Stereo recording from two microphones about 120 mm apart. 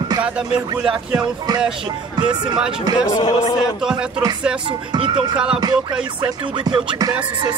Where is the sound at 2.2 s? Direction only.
40° right (ahead or behind).